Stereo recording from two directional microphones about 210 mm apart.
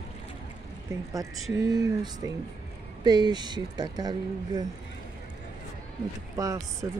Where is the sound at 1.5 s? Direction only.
20° right (ahead or behind).